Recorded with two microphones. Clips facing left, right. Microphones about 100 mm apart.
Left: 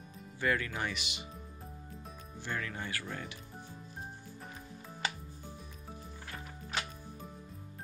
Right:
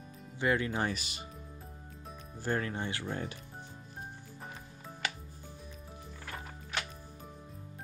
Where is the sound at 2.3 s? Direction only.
40° right (ahead or behind); by 3.2 s 25° right (ahead or behind).